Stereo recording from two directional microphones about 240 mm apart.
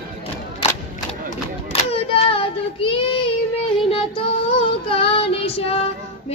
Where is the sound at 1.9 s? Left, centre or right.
Left.